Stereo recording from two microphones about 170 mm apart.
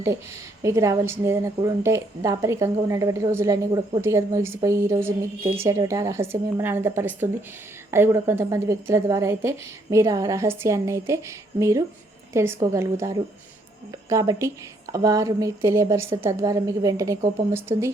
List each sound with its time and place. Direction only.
0.6 s a woman's voice: 15° right (ahead or behind)